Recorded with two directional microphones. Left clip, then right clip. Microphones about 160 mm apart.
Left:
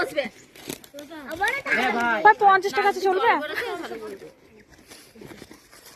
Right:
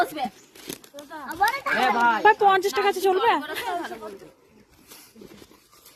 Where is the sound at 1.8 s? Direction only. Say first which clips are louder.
Right 6 dB; 20° right (ahead or behind).